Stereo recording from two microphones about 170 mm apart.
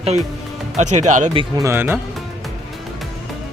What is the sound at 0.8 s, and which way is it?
Speech, 45° right (ahead or behind).